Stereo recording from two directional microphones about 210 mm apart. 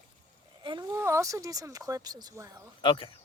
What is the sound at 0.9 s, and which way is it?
Speech, 10° right (ahead or behind).